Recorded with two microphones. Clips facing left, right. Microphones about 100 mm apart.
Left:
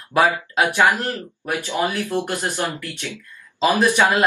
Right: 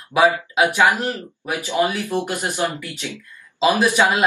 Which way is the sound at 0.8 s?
15° right (ahead or behind).